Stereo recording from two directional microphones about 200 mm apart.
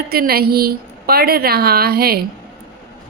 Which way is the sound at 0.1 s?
50° right (ahead or behind).